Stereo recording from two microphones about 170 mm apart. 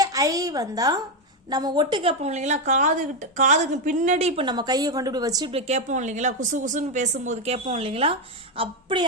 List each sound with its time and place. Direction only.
0.0 s a woman's voice: 20° right (ahead or behind); by 4.4 s 40° right (ahead or behind)
4.4 s a woman's voice: 25° right (ahead or behind)
5.5 s a woman's voice: 35° right (ahead or behind)